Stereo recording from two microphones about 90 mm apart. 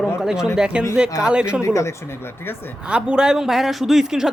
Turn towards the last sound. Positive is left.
turn(degrees=-5)  # may be behind; listen again after turning